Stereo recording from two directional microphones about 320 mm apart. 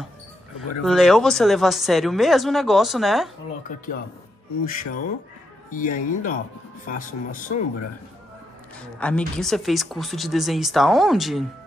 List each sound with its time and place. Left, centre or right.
0.6 s speech: centre
3.6 s speech: left
9.0 s speech: centre